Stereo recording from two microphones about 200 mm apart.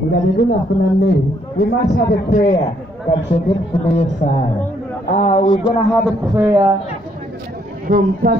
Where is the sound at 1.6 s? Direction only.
45° left (ahead or behind).